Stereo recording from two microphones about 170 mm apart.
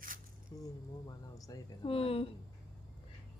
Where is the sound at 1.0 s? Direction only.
20° left (ahead or behind).